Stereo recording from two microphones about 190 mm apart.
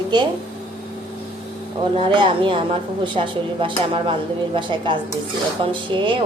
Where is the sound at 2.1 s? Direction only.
25° right (ahead or behind).